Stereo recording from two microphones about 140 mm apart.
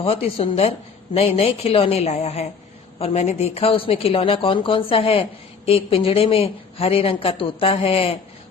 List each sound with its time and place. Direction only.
0.0 s a woman's voice: 45° left (ahead or behind)